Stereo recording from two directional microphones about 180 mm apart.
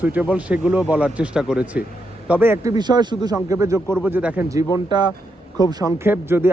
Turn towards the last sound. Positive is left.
turn(degrees=-10)  # may be behind; listen again after turning